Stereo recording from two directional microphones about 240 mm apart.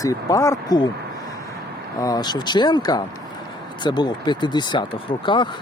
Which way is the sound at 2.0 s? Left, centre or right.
Centre.